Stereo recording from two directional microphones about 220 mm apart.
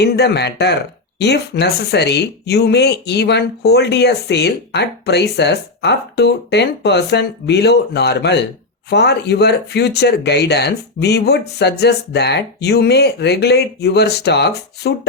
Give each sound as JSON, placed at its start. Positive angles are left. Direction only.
{"t": 0.0, "sound": "speech", "side_deg": 50}